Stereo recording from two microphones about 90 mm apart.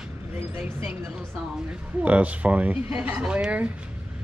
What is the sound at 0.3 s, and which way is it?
Speech, 20° right (ahead or behind).